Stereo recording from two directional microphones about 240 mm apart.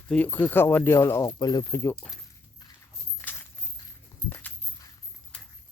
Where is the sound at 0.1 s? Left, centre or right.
Centre.